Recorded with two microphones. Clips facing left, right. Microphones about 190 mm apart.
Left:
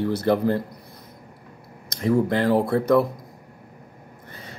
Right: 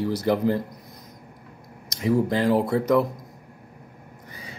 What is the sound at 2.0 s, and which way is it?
Speech, 15° right (ahead or behind).